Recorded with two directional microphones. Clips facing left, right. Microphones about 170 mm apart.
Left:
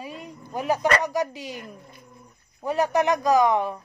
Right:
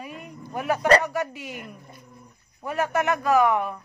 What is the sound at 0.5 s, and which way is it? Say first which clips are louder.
Speech: left 1 dB; 15° left (ahead or behind).